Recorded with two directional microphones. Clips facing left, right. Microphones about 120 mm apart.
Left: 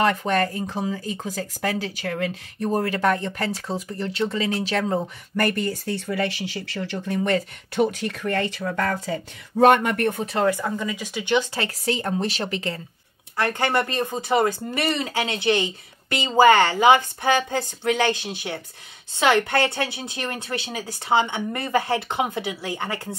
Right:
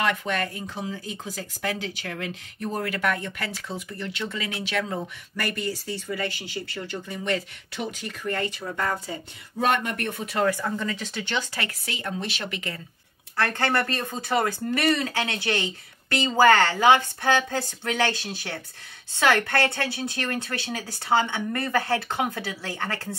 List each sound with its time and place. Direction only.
0.0 s speech: 40° left (ahead or behind); by 7.2 s 90° left
7.2 s speech: 50° left (ahead or behind)
10.2 s speech: 25° left (ahead or behind)
11.5 s speech: 35° left (ahead or behind)
13.4 s speech: 15° left (ahead or behind)